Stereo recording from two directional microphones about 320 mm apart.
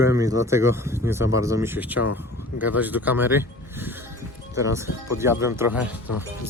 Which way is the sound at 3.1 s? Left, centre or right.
Centre.